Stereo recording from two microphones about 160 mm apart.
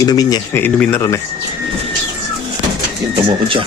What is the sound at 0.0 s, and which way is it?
Speech, 25° left (ahead or behind).